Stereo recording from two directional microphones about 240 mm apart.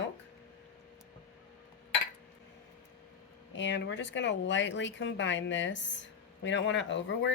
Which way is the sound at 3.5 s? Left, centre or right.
Left.